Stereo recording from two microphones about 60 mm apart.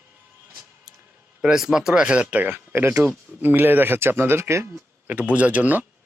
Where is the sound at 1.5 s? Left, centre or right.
Centre.